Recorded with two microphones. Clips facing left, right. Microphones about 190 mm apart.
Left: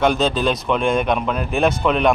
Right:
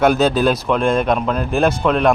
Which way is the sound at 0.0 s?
5° right (ahead or behind).